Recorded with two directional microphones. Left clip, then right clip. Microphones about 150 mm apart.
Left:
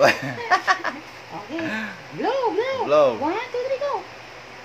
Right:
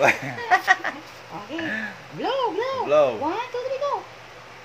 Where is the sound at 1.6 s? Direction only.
25° left (ahead or behind).